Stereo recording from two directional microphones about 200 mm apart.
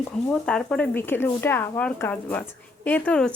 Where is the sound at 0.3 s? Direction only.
5° left (ahead or behind).